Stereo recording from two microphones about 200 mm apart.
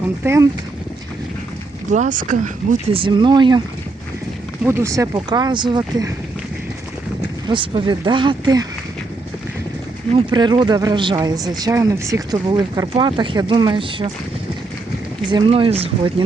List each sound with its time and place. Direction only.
0.2 s speech: 10° right (ahead or behind)
1.9 s speech: 40° right (ahead or behind)
2.9 s speech: 25° right (ahead or behind)
4.6 s speech: 15° right (ahead or behind)
7.4 s speech: 25° right (ahead or behind)
10.2 s speech: 20° right (ahead or behind)
15.3 s speech: 25° right (ahead or behind)